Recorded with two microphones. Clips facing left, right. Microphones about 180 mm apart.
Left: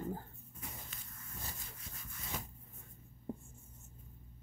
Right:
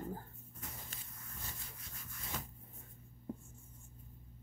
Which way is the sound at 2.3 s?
10° left (ahead or behind).